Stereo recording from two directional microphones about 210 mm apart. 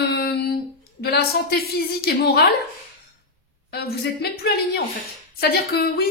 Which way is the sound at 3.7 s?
50° left (ahead or behind).